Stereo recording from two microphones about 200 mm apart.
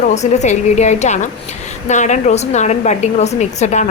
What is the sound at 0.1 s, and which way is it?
A woman's voice, 35° left (ahead or behind).